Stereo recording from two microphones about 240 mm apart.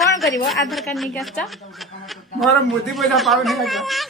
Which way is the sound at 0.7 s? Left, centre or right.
Centre.